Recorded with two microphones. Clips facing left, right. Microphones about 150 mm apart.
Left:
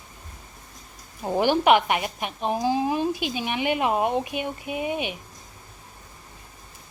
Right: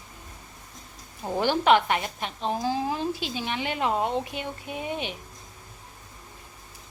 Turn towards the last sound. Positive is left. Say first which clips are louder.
# left 4 dB
turn(degrees=10)  # may be behind; listen again after turning